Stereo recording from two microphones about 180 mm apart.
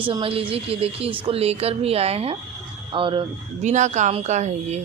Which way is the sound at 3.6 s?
40° right (ahead or behind).